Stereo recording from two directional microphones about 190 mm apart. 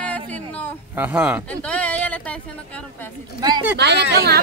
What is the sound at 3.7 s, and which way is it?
Speech, 60° right (ahead or behind).